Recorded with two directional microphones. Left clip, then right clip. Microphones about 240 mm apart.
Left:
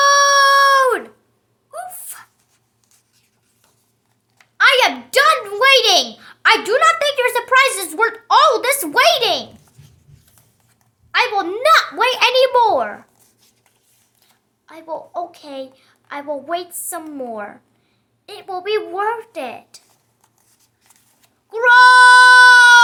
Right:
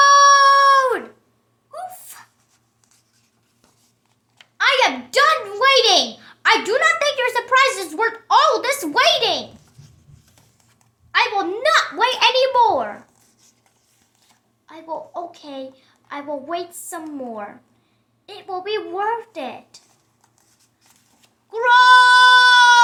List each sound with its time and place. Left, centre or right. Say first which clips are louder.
0.0 s dog: right 1 dB; left
1.7 s a sound: left 2 dB; left
4.5 s a sound: left 4 dB; centre
11.1 s a child's voice: left 1 dB; left
14.7 s a child's voice: left 2 dB; centre
21.5 s cat: left 3 dB; left